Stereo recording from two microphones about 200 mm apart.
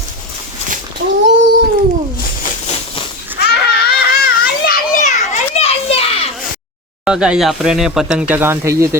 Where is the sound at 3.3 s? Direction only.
55° left (ahead or behind).